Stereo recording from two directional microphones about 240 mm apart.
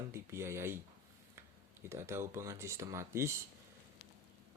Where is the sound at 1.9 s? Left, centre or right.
Centre.